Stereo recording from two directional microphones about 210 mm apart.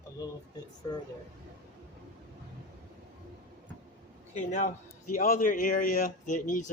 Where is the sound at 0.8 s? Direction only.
15° left (ahead or behind).